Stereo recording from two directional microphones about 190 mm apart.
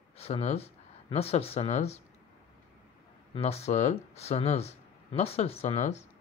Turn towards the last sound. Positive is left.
turn(degrees=35)  # may be behind; listen again after turning